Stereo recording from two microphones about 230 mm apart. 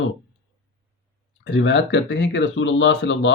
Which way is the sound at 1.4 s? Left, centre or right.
Left.